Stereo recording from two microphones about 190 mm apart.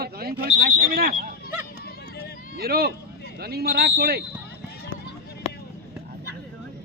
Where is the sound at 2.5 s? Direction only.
55° right (ahead or behind).